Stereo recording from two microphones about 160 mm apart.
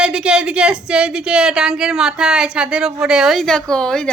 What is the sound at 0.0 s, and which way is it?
A woman's voice, 5° right (ahead or behind).